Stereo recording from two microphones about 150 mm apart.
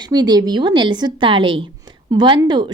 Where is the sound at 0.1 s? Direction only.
25° right (ahead or behind).